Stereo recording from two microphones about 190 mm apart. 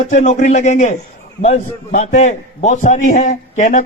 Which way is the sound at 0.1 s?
40° left (ahead or behind).